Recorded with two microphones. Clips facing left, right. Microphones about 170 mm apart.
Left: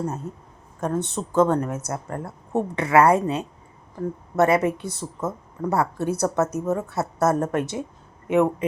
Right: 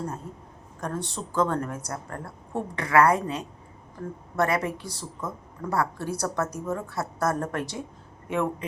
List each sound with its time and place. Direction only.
0.8 s a woman's voice: 20° left (ahead or behind)